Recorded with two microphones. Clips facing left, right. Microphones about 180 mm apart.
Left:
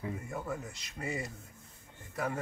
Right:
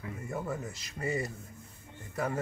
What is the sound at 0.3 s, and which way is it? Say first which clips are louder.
Speech: right 3 dB; centre (ahead or behind).